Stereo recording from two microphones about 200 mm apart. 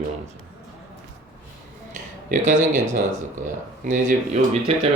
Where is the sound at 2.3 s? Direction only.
40° right (ahead or behind).